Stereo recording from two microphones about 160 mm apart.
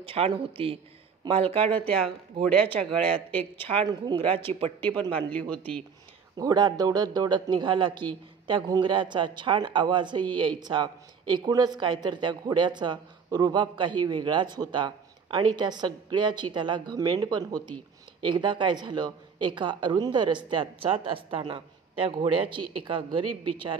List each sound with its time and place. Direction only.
0.0 s speech: 35° right (ahead or behind)
1.6 s speech: 10° left (ahead or behind)
3.6 s speech: 35° right (ahead or behind)
4.9 s speech: 25° right (ahead or behind)
5.3 s speech: 10° left (ahead or behind)
6.3 s speech: 25° right (ahead or behind)